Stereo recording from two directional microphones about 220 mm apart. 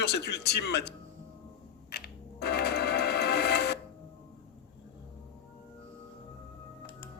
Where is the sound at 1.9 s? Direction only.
45° left (ahead or behind).